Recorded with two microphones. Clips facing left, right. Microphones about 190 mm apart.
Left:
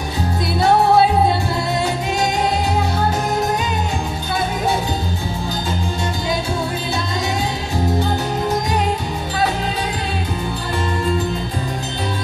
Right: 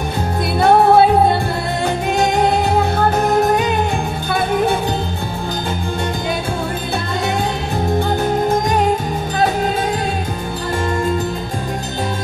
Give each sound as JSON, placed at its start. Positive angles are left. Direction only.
{"t": 0.6, "sound": "music", "side_deg": -55}
{"t": 2.7, "sound": "music", "side_deg": -55}
{"t": 8.5, "sound": "music", "side_deg": -50}